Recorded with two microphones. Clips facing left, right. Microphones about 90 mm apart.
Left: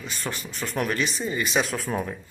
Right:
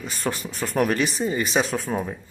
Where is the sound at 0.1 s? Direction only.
40° right (ahead or behind).